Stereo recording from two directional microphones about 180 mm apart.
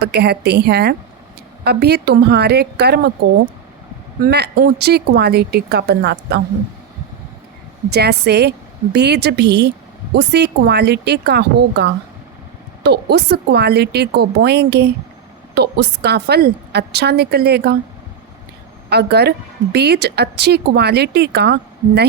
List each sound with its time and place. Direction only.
0.0 s speech: 65° right (ahead or behind)
4.2 s speech: 60° right (ahead or behind)
7.9 s a woman's voice: 65° right (ahead or behind)
18.9 s speech: 65° right (ahead or behind)